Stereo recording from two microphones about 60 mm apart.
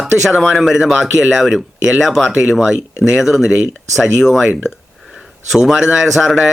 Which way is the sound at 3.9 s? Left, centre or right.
Centre.